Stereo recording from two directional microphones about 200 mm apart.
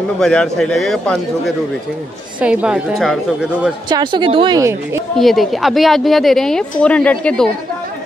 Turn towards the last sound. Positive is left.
turn(degrees=5)  # may be behind; listen again after turning